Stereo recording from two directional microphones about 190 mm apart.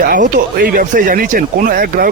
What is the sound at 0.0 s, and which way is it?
Speech, 45° right (ahead or behind).